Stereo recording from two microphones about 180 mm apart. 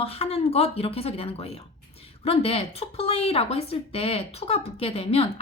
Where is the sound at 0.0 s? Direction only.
35° left (ahead or behind).